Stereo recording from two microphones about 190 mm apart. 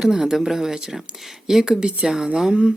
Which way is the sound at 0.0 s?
5° right (ahead or behind).